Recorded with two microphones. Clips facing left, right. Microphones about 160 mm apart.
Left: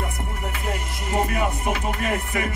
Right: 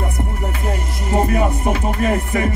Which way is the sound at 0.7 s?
35° right (ahead or behind).